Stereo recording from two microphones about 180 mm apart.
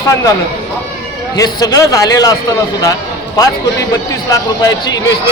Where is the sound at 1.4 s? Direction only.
20° left (ahead or behind).